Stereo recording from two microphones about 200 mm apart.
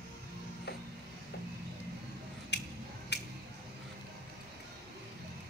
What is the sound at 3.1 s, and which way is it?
Music, 60° left (ahead or behind).